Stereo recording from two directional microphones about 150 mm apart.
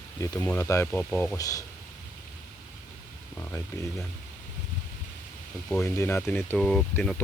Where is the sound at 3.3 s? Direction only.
15° left (ahead or behind).